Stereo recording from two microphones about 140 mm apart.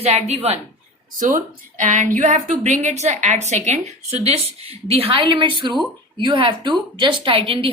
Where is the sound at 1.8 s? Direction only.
65° right (ahead or behind).